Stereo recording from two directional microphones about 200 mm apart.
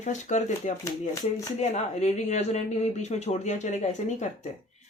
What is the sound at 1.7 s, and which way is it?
Speech, 35° left (ahead or behind).